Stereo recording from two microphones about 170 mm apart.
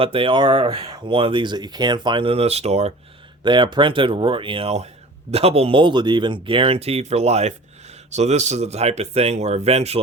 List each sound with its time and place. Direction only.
0.0 s speech: 30° right (ahead or behind)
3.4 s speech: 30° right (ahead or behind)